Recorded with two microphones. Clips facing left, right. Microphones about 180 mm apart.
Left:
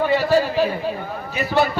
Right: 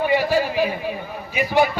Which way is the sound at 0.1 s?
15° right (ahead or behind).